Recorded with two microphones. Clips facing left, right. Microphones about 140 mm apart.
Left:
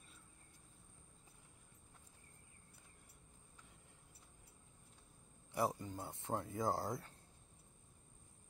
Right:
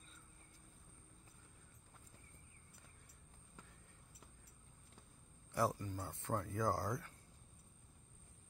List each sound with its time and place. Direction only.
5.5 s speech: 20° left (ahead or behind)